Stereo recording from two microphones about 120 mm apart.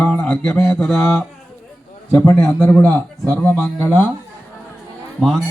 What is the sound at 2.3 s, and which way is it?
A man's voice, 15° left (ahead or behind).